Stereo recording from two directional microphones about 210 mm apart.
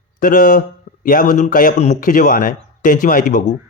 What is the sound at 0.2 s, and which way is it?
A man's voice, 40° left (ahead or behind).